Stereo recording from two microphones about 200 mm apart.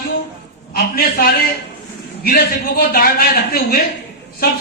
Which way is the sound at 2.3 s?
50° left (ahead or behind).